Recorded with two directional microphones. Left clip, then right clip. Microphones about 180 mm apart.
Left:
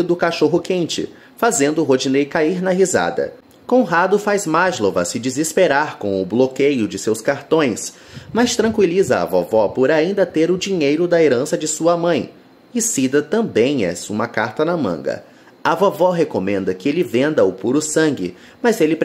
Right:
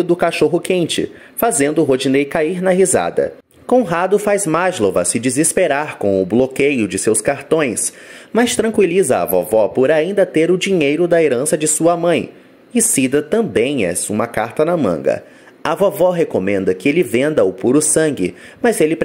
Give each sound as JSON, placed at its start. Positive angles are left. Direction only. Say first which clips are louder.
{"t": 0.0, "sound": "speech", "louder": "right 2 dB", "side_deg": -20}
{"t": 6.0, "sound": "speech", "louder": "right 4 dB", "side_deg": -10}
{"t": 6.4, "sound": "a man's voice", "louder": "right 1 dB", "side_deg": -25}